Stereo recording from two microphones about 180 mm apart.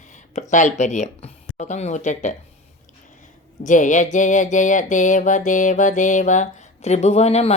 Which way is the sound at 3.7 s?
45° left (ahead or behind).